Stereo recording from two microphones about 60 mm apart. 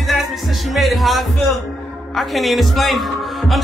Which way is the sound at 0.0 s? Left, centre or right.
Centre.